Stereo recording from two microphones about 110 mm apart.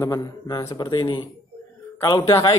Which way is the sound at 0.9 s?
45° left (ahead or behind).